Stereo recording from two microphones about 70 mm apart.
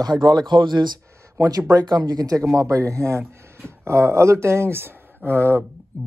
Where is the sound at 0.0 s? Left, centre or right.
Right.